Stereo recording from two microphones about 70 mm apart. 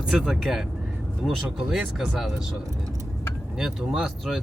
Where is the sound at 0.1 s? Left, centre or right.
Centre.